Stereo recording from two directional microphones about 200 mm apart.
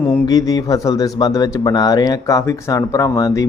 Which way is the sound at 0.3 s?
20° left (ahead or behind).